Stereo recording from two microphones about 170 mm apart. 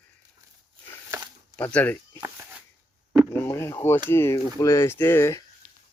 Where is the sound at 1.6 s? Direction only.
10° left (ahead or behind).